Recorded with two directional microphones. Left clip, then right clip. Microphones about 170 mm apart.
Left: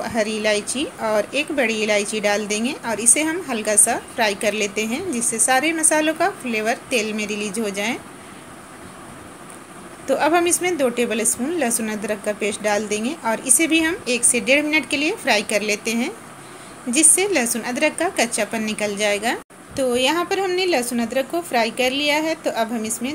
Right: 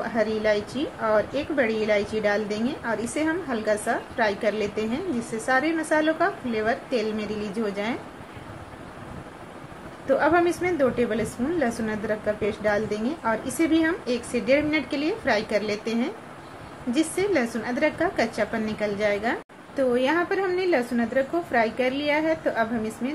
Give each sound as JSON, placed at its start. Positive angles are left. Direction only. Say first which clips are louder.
{"t": 0.0, "sound": "a woman's voice", "louder": "left 3 dB", "side_deg": 20}
{"t": 10.1, "sound": "a woman's voice", "louder": "left 3 dB", "side_deg": 15}
{"t": 17.2, "sound": "a woman's voice", "louder": "left 4 dB", "side_deg": 15}